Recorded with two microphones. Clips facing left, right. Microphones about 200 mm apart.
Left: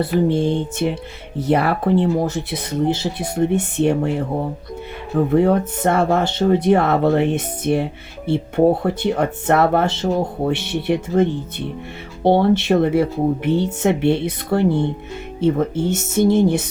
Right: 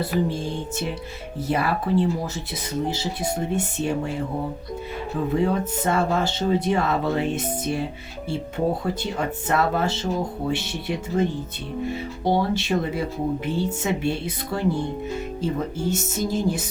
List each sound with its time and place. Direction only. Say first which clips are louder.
0.0 s speech: left 7 dB; 65° left (ahead or behind)
1.5 s speech: left 6 dB; 60° left (ahead or behind)